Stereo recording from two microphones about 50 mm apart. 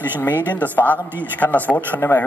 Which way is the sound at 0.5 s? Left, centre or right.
Left.